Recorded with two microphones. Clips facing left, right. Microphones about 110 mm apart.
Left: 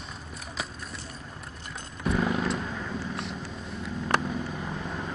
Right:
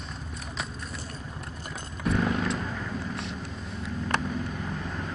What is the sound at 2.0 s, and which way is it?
Vehicle, centre (ahead or behind).